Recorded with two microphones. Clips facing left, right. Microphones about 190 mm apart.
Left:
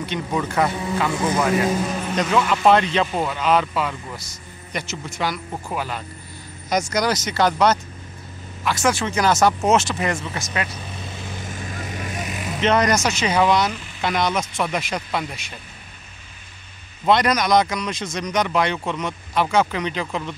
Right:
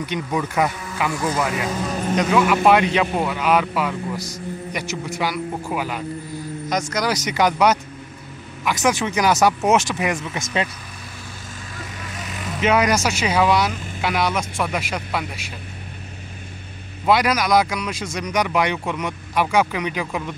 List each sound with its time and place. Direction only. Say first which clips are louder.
0.0 s speech: right 1 dB; 10° right (ahead or behind)
1.1 s speech: even; 20° left (ahead or behind)
2.1 s speech: right 3 dB; 10° right (ahead or behind)
7.2 s speech: right 1 dB; 15° right (ahead or behind)
11.2 s vehicle: left 5 dB; 20° left (ahead or behind)
12.2 s vehicle: even; 15° left (ahead or behind)
12.5 s speech: even; 10° right (ahead or behind)
17.0 s speech: even; 5° right (ahead or behind)